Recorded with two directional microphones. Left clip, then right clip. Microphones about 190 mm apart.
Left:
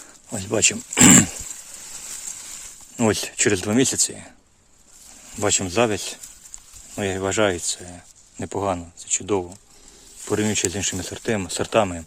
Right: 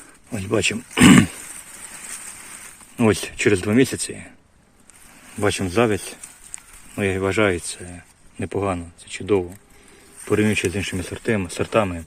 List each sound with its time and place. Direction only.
0.3 s speech: 5° left (ahead or behind)
3.0 s speech: 5° left (ahead or behind)
5.4 s speech: centre (ahead or behind)